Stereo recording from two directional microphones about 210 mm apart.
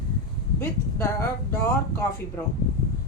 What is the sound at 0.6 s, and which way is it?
A woman's voice, 10° left (ahead or behind).